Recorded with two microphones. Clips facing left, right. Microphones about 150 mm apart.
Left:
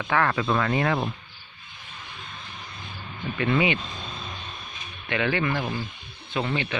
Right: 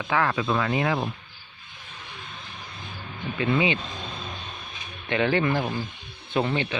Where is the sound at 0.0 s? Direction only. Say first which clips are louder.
Left 1 dB; 15° right (ahead or behind).